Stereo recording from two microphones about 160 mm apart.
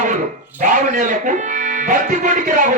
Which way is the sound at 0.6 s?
50° right (ahead or behind).